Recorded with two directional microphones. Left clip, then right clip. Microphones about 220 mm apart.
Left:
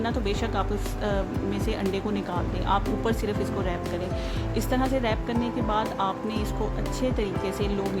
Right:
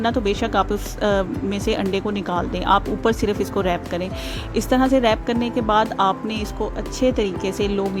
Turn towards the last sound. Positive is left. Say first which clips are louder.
# right 6 dB
turn(degrees=-30)  # may be behind; listen again after turning